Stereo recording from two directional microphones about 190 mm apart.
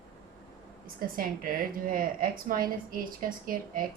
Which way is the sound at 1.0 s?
50° right (ahead or behind).